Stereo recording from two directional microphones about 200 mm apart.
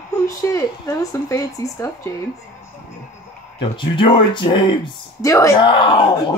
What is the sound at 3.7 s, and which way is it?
Speech, 25° left (ahead or behind).